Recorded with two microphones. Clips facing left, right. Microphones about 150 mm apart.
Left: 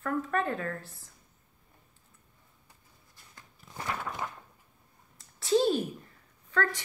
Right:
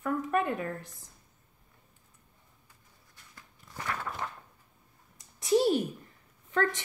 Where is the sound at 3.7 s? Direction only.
15° left (ahead or behind).